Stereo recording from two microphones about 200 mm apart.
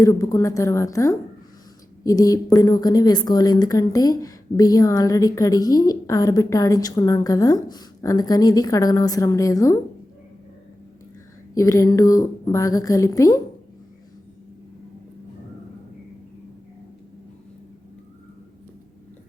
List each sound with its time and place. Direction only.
0.0 s a woman's voice: 15° left (ahead or behind)
11.5 s a woman's voice: 15° left (ahead or behind)